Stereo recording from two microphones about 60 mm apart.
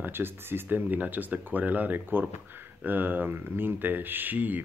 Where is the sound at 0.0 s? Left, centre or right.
Right.